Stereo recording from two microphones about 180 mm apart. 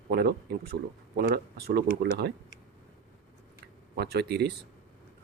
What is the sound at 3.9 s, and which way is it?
Speech, 65° right (ahead or behind).